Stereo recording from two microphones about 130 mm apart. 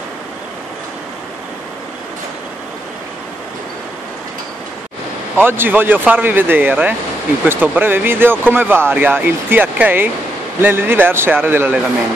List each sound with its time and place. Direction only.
5.4 s speech: 15° right (ahead or behind)